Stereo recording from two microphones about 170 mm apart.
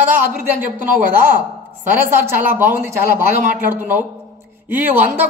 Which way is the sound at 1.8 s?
10° right (ahead or behind).